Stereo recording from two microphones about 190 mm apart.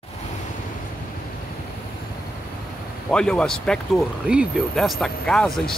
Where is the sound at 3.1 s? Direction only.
5° left (ahead or behind).